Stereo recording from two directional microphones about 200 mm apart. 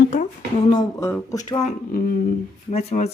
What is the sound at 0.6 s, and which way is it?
Speech, 20° left (ahead or behind).